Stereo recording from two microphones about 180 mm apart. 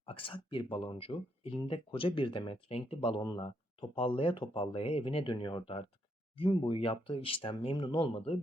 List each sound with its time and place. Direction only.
0.0 s speech: 30° left (ahead or behind)